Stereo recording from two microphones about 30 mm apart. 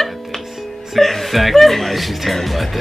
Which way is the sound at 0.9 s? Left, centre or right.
Centre.